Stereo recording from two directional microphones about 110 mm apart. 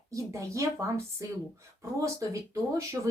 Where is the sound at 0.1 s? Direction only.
30° right (ahead or behind).